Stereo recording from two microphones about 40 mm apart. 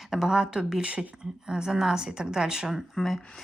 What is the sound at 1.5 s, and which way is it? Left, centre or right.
A woman's voice, centre.